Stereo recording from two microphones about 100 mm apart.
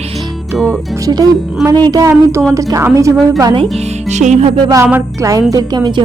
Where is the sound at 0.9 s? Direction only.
40° right (ahead or behind).